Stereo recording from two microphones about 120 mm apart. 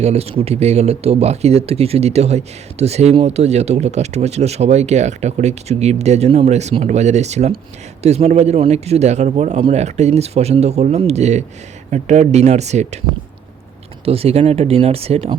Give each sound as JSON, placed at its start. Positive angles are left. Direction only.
{"t": 0.0, "sound": "speech", "side_deg": -60}
{"t": 14.0, "sound": "speech", "side_deg": -55}